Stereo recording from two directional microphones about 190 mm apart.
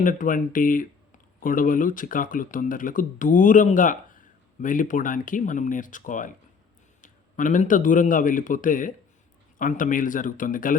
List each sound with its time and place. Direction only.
0.0 s a man's voice: 45° left (ahead or behind)